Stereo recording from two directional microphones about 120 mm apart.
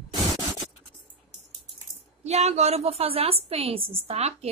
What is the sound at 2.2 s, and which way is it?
A woman's voice, 65° right (ahead or behind).